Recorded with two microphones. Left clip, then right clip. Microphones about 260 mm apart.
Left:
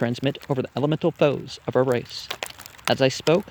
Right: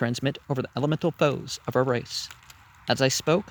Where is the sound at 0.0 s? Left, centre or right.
Right.